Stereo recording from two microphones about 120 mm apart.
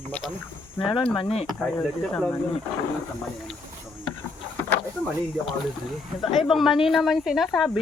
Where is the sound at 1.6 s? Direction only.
5° left (ahead or behind).